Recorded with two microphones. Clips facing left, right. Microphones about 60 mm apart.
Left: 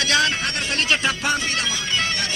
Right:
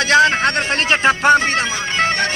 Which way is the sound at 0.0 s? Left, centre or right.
Right.